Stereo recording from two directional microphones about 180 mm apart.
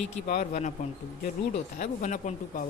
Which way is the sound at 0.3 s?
45° left (ahead or behind).